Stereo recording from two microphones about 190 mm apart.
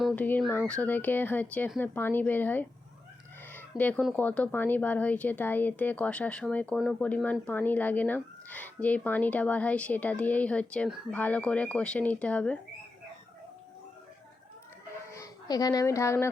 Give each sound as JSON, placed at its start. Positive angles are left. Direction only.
{"t": 0.0, "sound": "speech", "side_deg": 0}
{"t": 3.4, "sound": "chicken", "side_deg": 10}
{"t": 4.0, "sound": "speech", "side_deg": 5}
{"t": 15.1, "sound": "speech", "side_deg": 20}